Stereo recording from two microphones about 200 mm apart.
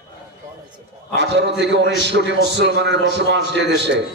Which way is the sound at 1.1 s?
60° right (ahead or behind).